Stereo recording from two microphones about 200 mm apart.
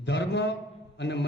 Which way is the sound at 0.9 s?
60° left (ahead or behind).